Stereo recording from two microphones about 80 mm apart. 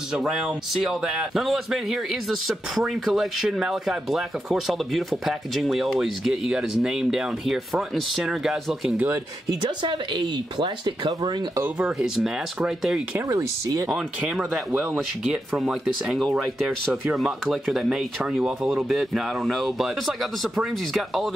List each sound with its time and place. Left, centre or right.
0.1 s speech: centre
9.6 s speech: right
11.8 s speech: centre
15.5 s speech: centre